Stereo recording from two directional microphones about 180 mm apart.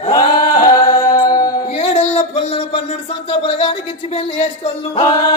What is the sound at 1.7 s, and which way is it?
Music, 30° left (ahead or behind).